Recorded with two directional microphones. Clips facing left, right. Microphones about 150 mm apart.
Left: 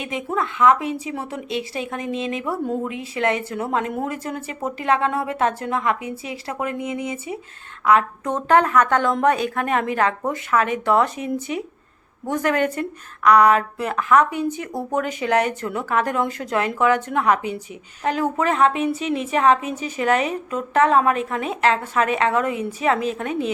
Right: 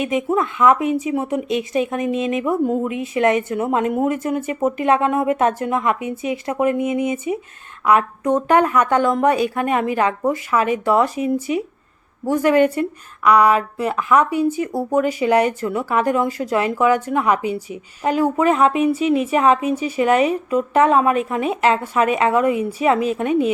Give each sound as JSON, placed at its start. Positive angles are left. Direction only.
{"t": 0.1, "sound": "speech", "side_deg": -15}